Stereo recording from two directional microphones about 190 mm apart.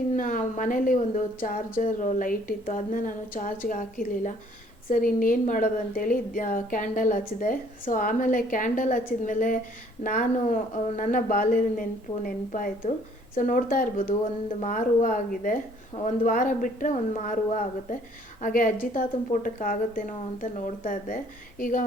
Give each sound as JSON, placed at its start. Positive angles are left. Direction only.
{"t": 0.1, "sound": "a woman's voice", "side_deg": 45}